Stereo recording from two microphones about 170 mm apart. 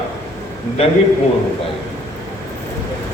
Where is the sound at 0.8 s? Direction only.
35° left (ahead or behind).